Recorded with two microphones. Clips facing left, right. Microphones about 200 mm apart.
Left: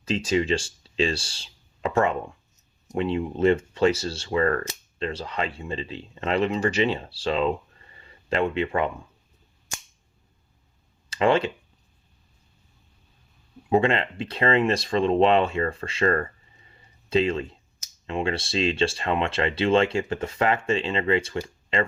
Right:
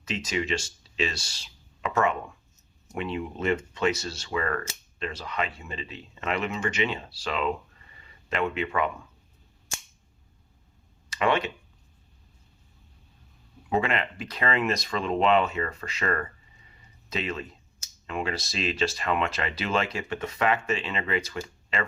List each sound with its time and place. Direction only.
0.0 s speech: 30° left (ahead or behind)
7.9 s a sound: 30° left (ahead or behind)
11.1 s speech: 30° left (ahead or behind)
13.7 s speech: 30° left (ahead or behind)